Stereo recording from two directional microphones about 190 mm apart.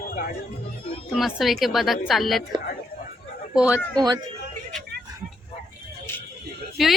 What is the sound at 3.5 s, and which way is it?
Speech, 5° right (ahead or behind).